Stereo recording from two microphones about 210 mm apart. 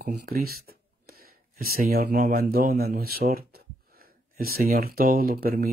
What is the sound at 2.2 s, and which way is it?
Speech, 45° right (ahead or behind).